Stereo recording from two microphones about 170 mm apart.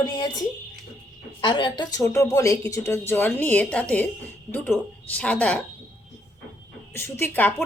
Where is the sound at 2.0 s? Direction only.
15° left (ahead or behind).